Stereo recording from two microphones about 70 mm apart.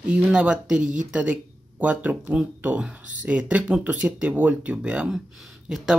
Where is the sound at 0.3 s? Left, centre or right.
Centre.